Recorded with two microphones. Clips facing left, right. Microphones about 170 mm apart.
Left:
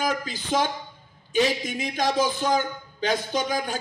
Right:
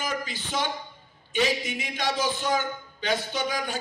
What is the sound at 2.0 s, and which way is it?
A man's voice, 45° left (ahead or behind).